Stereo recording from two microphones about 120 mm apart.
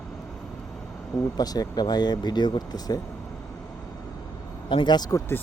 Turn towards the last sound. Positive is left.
turn(degrees=35)  # may be behind; listen again after turning